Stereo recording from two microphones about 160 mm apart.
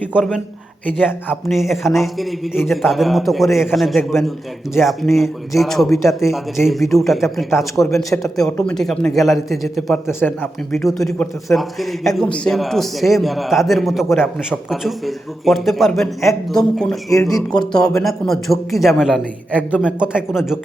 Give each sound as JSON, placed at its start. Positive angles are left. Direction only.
{"t": 0.1, "sound": "a man's voice", "side_deg": -5}
{"t": 1.5, "sound": "a man's voice", "side_deg": 0}
{"t": 10.1, "sound": "speech", "side_deg": 15}
{"t": 10.7, "sound": "a man's voice", "side_deg": 0}
{"t": 17.1, "sound": "speech", "side_deg": 20}
{"t": 18.0, "sound": "a man's voice", "side_deg": 0}